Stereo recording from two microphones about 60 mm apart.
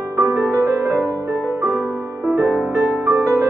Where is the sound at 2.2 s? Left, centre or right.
Centre.